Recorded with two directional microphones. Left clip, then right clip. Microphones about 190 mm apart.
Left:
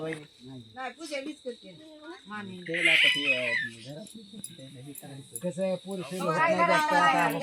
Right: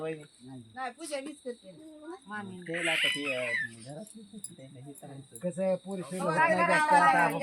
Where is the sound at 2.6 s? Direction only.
35° right (ahead or behind).